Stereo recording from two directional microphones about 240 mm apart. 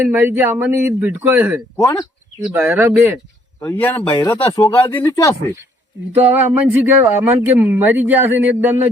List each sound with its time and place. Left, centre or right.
0.0 s speech: centre
1.7 s speech: centre
2.4 s speech: centre
3.6 s speech: centre
6.3 s speech: centre